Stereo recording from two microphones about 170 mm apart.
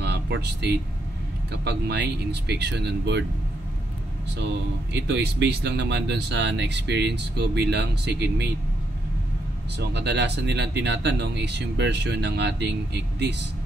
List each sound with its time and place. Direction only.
0.0 s speech: 85° right
4.9 s speech: 90° right
9.8 s speech: 85° right